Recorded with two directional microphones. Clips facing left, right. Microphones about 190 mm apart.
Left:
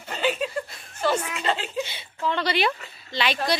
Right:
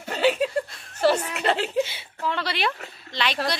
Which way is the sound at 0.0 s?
65° right (ahead or behind).